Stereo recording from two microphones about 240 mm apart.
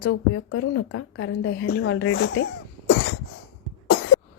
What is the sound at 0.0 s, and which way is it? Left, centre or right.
A woman's voice, left.